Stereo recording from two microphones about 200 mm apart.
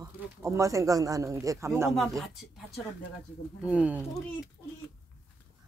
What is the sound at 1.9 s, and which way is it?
Speech, centre (ahead or behind).